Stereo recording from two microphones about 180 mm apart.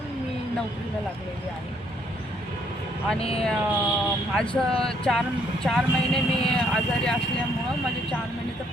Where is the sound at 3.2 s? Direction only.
35° left (ahead or behind).